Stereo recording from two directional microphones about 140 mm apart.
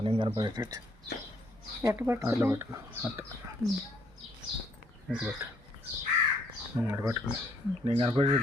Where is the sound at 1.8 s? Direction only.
15° right (ahead or behind).